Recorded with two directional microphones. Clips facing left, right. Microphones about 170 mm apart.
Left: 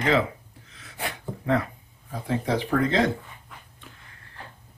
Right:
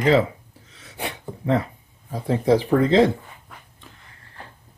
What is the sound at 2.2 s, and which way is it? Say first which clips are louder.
Speech: right 7 dB; 35° right (ahead or behind).